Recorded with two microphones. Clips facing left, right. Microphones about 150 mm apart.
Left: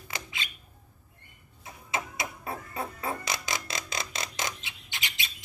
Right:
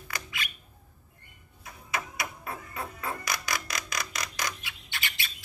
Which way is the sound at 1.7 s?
25° left (ahead or behind).